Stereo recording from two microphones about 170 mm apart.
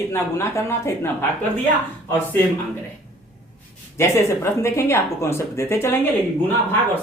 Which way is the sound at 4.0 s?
15° left (ahead or behind).